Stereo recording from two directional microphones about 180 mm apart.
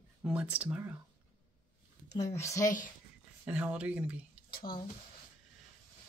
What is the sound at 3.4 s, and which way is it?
Speech, 5° right (ahead or behind).